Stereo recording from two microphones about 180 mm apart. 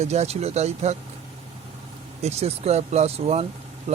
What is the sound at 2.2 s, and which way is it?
Speech, 35° right (ahead or behind).